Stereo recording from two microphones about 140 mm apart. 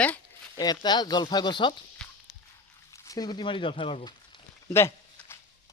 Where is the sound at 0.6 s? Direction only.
30° left (ahead or behind).